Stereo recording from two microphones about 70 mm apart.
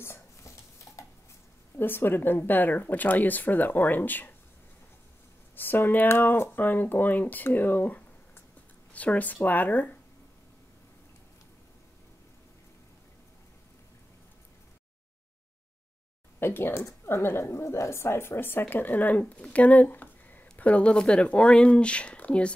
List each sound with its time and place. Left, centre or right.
0.0 s dishes: left
1.8 s a woman's voice: left
5.6 s a woman's voice: left
16.3 s a woman's voice: left; by 22.5 s centre